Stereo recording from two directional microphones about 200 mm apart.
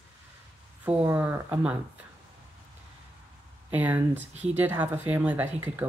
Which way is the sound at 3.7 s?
10° right (ahead or behind).